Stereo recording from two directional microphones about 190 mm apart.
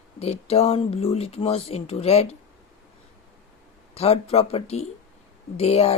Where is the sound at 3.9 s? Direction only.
35° left (ahead or behind).